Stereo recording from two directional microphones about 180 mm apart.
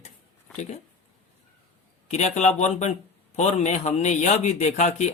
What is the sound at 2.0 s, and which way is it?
A man's voice, 40° left (ahead or behind).